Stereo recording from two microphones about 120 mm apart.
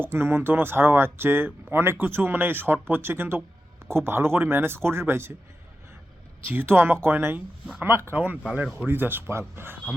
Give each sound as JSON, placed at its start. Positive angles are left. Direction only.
{"t": 0.0, "sound": "speech", "side_deg": -20}
{"t": 6.5, "sound": "speech", "side_deg": -15}